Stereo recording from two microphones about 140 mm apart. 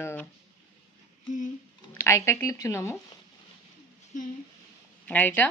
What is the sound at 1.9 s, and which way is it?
Speech, 20° left (ahead or behind).